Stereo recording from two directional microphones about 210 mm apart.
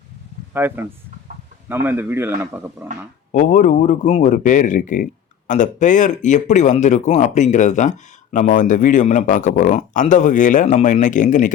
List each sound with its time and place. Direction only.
0.5 s speech: 10° right (ahead or behind)
3.3 s speech: 35° left (ahead or behind)